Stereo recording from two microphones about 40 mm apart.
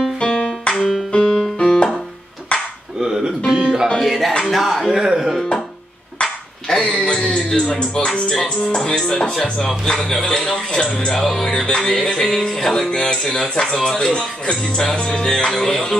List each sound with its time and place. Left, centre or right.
0.2 s music: centre
1.2 s music: centre
1.6 s music: centre
2.5 s a sound: left
3.0 s music: centre
4.0 s music: centre
4.5 s speech: centre
4.9 s speech: centre
6.7 s a sound: centre
7.2 s speech: centre